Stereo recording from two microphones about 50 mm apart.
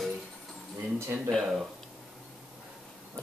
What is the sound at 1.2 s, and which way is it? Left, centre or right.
Speech, centre.